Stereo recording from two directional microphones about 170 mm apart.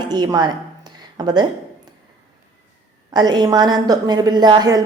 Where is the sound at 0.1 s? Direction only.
25° right (ahead or behind).